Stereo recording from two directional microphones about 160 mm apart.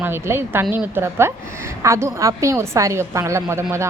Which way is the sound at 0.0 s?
15° right (ahead or behind).